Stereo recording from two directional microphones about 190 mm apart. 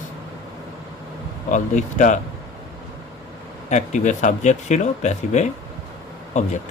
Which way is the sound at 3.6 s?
40° left (ahead or behind).